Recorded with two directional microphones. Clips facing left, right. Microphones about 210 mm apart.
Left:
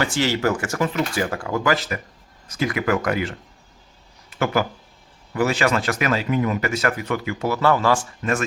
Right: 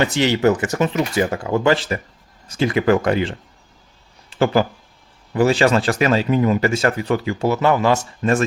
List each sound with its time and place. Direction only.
0.0 s speech: 20° right (ahead or behind)
4.3 s a sound: 30° right (ahead or behind)
5.3 s speech: 30° right (ahead or behind)